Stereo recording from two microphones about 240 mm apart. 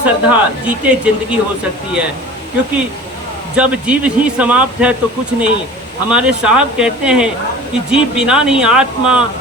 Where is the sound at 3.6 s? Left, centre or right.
Centre.